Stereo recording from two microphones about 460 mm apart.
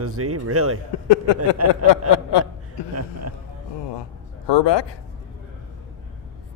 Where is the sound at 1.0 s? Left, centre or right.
Left.